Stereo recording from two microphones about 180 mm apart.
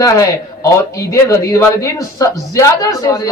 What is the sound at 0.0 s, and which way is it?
Speech, 20° left (ahead or behind).